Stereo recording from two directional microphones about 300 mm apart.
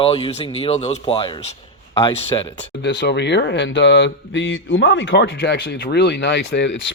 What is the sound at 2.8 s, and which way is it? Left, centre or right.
Speech, left.